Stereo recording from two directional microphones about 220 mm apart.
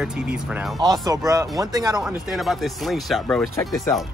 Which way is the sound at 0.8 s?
15° right (ahead or behind).